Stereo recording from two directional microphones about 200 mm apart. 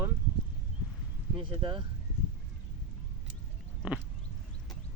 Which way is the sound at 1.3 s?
25° right (ahead or behind).